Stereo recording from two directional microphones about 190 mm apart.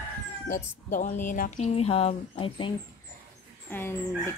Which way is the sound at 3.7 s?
10° left (ahead or behind).